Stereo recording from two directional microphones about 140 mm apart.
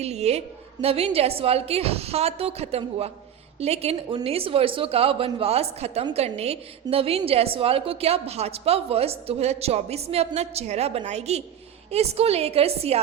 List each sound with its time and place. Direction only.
0.0 s a woman's voice: 50° right (ahead or behind)